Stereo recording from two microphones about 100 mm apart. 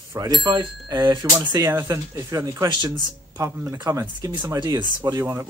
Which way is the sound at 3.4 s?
30° right (ahead or behind).